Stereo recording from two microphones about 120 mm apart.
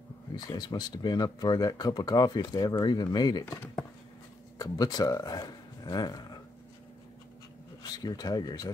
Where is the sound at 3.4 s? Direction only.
15° left (ahead or behind).